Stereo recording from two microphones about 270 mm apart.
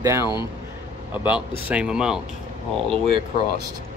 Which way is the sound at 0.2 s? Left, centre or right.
Centre.